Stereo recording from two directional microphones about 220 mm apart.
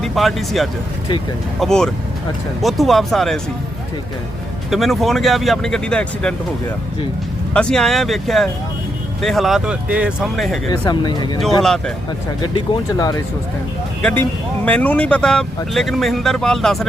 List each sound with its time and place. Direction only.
0.0 s speech: centre (ahead or behind)
4.7 s speech: centre (ahead or behind)
7.5 s speech: 5° left (ahead or behind)
10.7 s speech: 20° left (ahead or behind)
12.5 s speech: 20° left (ahead or behind)
14.6 s speech: 5° left (ahead or behind)